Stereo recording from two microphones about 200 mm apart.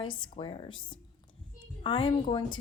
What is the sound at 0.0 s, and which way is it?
A woman's voice, 25° left (ahead or behind).